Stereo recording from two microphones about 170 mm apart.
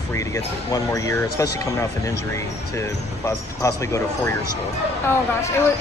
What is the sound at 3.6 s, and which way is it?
Speech, 15° left (ahead or behind).